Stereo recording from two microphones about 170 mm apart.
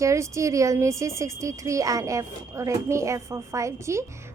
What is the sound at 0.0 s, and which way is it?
A woman's voice, 15° right (ahead or behind).